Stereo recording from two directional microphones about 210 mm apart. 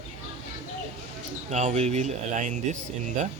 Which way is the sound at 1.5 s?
35° right (ahead or behind).